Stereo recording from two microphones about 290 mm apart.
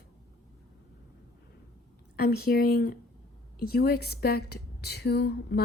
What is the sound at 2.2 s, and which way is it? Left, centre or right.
A woman's voice, left.